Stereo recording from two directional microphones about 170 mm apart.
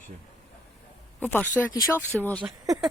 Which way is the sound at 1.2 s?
10° left (ahead or behind).